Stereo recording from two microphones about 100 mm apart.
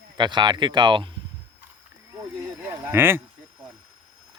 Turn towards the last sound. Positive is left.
turn(degrees=-25)  # may be behind; listen again after turning